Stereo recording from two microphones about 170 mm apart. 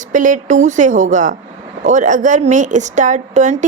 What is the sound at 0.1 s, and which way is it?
Speech, 50° right (ahead or behind).